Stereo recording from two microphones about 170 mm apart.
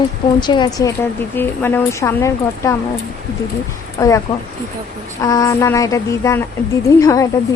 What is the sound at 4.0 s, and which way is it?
Speech, 15° left (ahead or behind).